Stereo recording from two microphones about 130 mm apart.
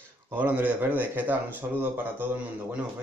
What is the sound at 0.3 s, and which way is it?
Speech, 15° right (ahead or behind).